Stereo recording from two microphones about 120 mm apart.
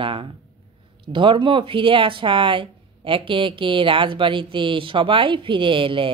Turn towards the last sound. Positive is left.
turn(degrees=-45)  # may be behind; listen again after turning